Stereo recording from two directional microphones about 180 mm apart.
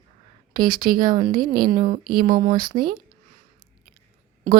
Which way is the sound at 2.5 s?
25° right (ahead or behind).